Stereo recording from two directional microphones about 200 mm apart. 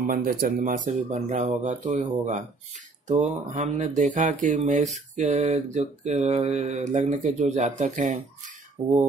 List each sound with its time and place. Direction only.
0.0 s speech: 45° right (ahead or behind)
1.1 s mantra: 40° right (ahead or behind)